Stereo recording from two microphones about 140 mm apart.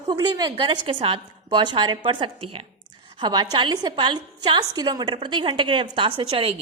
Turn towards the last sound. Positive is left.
turn(degrees=-40)  # may be behind; listen again after turning